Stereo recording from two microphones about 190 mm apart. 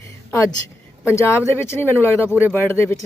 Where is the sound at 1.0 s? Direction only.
15° left (ahead or behind).